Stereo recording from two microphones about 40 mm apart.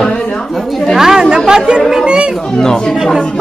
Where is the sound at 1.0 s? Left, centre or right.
Centre.